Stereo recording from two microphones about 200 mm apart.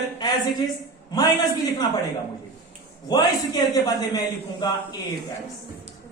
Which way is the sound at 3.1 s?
20° left (ahead or behind).